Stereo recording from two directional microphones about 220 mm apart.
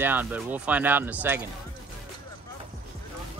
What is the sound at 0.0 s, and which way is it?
Speech, 10° right (ahead or behind).